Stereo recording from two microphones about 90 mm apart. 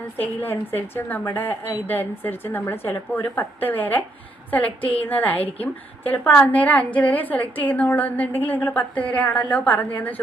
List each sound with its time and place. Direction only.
0.2 s a woman's voice: 20° left (ahead or behind)
5.0 s a woman's voice: 20° left (ahead or behind)